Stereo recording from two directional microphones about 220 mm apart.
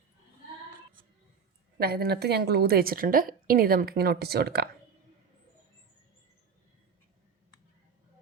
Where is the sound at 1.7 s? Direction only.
45° right (ahead or behind).